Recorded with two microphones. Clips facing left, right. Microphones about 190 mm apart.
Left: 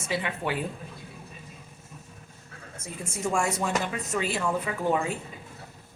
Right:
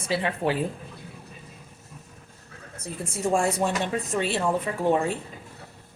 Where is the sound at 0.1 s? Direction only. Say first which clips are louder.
Right 4 dB; 35° right (ahead or behind).